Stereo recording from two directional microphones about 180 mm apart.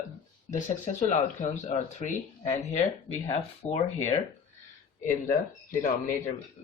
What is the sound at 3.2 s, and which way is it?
Speech, 35° left (ahead or behind).